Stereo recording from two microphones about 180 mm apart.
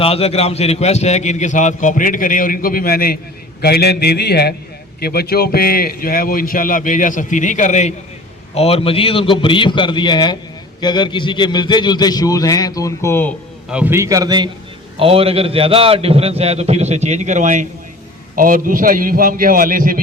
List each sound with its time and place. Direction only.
0.0 s a man's voice: 35° left (ahead or behind); by 13.3 s 15° left (ahead or behind)
13.7 s a man's voice: 10° right (ahead or behind); by 20.0 s 50° right (ahead or behind)